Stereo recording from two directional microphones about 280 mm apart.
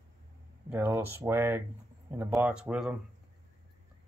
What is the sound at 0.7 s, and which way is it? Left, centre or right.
Speech, centre.